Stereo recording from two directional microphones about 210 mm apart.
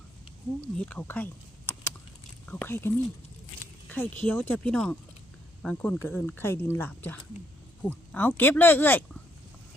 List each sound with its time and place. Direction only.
0.6 s speech: 5° left (ahead or behind)